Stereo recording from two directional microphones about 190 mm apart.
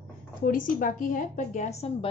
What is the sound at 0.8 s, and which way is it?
A woman's voice, 45° left (ahead or behind).